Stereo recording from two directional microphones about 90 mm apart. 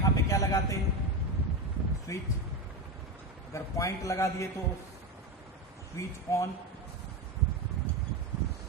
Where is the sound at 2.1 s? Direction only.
35° left (ahead or behind).